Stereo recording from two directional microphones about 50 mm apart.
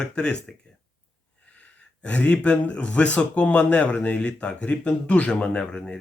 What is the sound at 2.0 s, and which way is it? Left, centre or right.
Speech, left.